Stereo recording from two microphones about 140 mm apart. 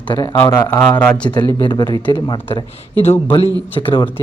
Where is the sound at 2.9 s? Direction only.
15° left (ahead or behind).